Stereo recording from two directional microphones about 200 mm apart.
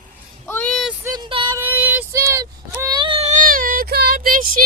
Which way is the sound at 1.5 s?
10° right (ahead or behind).